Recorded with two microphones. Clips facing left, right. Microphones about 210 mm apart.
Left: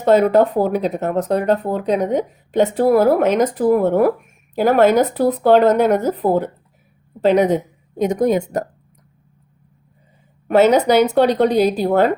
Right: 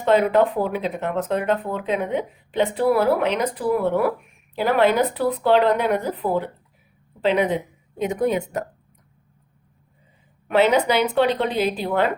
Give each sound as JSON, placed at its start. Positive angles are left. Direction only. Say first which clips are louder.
{"t": 0.0, "sound": "speech", "louder": "left 4 dB", "side_deg": 40}
{"t": 10.5, "sound": "speech", "louder": "left 5 dB", "side_deg": 45}